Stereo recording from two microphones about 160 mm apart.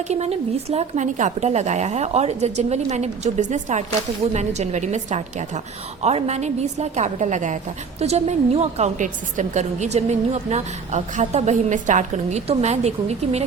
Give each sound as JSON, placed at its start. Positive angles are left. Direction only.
{"t": 0.1, "sound": "a woman's voice", "side_deg": -40}